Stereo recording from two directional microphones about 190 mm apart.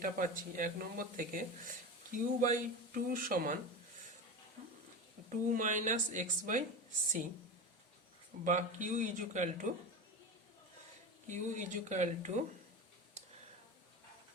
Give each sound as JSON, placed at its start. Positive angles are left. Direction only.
{"t": 0.0, "sound": "speech", "side_deg": -45}
{"t": 5.3, "sound": "speech", "side_deg": -45}
{"t": 8.4, "sound": "speech", "side_deg": -40}
{"t": 11.3, "sound": "speech", "side_deg": -40}